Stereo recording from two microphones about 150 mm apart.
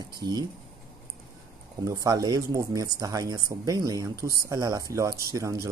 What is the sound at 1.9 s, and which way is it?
Speech, 25° right (ahead or behind).